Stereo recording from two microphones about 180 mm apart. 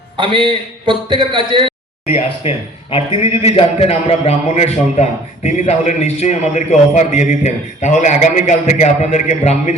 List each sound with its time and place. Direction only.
0.2 s a man's voice: 30° right (ahead or behind)
2.0 s a man's voice: 35° left (ahead or behind)